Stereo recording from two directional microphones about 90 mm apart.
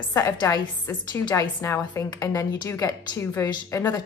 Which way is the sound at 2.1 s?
45° left (ahead or behind).